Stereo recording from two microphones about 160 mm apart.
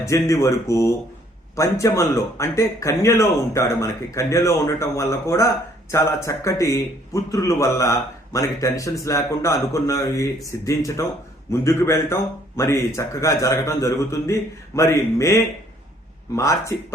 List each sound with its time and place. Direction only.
0.0 s a man's voice: 20° left (ahead or behind)